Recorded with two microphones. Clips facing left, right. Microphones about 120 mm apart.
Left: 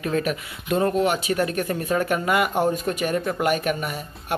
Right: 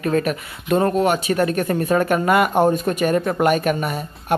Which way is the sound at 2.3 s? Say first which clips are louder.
Right 6 dB; 45° right (ahead or behind).